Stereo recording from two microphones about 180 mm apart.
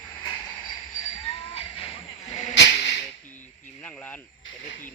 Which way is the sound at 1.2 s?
35° left (ahead or behind).